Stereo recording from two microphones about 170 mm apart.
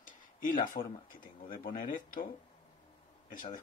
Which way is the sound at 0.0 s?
55° left (ahead or behind).